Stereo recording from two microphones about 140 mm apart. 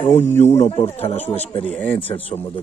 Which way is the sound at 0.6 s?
50° left (ahead or behind).